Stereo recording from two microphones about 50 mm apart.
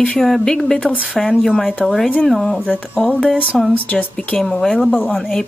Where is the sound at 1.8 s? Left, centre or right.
Centre.